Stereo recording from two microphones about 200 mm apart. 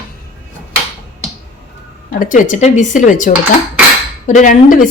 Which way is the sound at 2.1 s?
40° left (ahead or behind).